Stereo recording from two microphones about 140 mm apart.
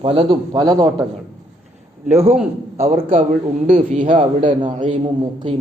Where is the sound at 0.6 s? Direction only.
30° right (ahead or behind).